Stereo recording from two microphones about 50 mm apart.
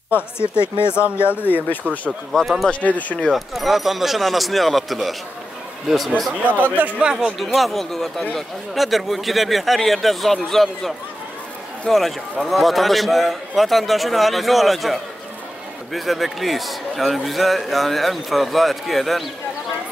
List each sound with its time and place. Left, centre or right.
0.1 s speech: left
1.0 s speech: right
1.4 s speech: left
2.4 s a man's voice: centre
2.7 s speech: left
3.3 s a man's voice: centre
6.7 s a man's voice: right
7.0 s speech: centre
7.3 s a man's voice: centre
8.2 s speech: centre
8.7 s a man's voice: centre
11.9 s a man's voice: centre